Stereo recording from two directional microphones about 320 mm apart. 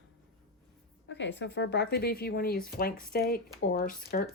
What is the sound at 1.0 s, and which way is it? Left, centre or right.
Speech, left.